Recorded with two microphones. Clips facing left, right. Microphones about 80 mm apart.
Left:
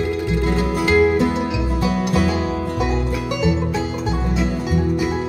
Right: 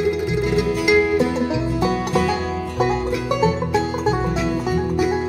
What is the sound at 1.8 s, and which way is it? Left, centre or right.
Music, right.